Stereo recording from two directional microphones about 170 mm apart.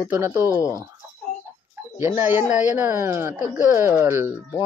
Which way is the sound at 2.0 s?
15° right (ahead or behind).